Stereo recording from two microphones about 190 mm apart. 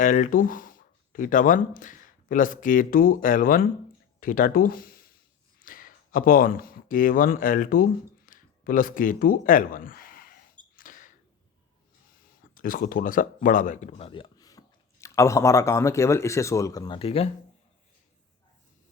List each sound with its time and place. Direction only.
0.0 s speech: 40° left (ahead or behind)
10.8 s a sound: 45° left (ahead or behind)
12.5 s speech: 45° left (ahead or behind); by 17.2 s 30° left (ahead or behind)